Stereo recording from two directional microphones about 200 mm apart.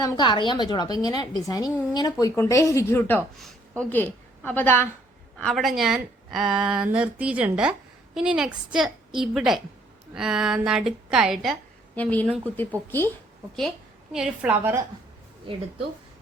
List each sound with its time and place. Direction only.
0.0 s a woman's voice: 20° left (ahead or behind)
13.6 s a woman's voice: centre (ahead or behind)